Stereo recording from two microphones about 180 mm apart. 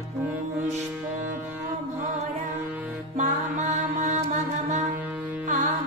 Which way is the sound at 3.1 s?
40° right (ahead or behind).